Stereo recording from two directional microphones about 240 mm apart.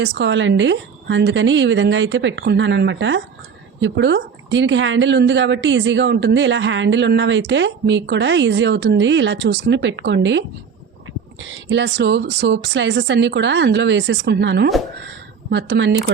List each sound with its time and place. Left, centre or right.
0.0 s a woman's voice: right